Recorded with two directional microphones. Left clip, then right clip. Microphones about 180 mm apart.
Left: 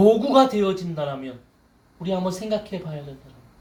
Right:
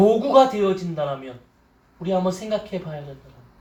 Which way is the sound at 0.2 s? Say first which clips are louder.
Right 2 dB; 45° left (ahead or behind).